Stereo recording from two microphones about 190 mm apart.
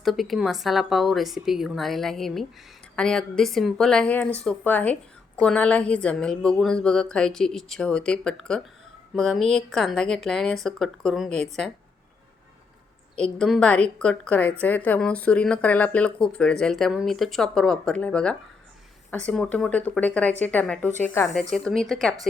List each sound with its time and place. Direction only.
0.0 s speech: centre (ahead or behind)
13.4 s speech: 5° left (ahead or behind)